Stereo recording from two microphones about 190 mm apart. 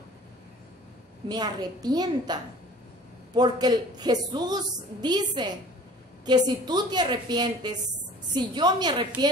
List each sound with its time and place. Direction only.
1.3 s a woman's voice: 20° right (ahead or behind)